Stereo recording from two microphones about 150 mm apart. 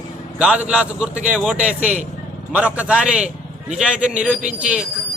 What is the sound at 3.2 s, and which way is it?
Vehicle, 50° right (ahead or behind).